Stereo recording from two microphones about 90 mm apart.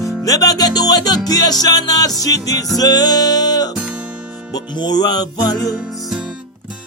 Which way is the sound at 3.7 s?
10° right (ahead or behind).